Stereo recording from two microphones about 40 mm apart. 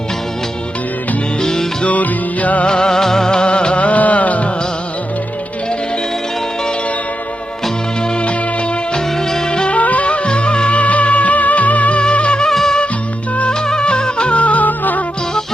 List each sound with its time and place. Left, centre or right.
1.4 s music: centre
1.8 s music: left
2.6 s music of bollywood: centre; by 4.4 s left
8.9 s music: centre
9.7 s music: left
12.5 s music: centre; by 15.0 s left